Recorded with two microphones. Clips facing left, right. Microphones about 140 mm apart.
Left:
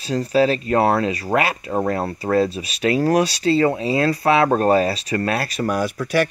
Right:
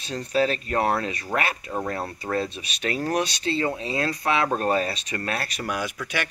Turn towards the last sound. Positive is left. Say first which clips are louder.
# left 9 dB
turn(degrees=40)  # may be behind; listen again after turning